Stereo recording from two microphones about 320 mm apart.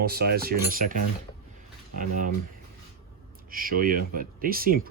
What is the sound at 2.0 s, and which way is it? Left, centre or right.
Speech, right.